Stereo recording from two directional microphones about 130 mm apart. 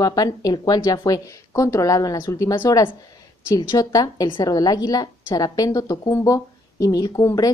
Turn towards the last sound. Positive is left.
turn(degrees=30)  # may be behind; listen again after turning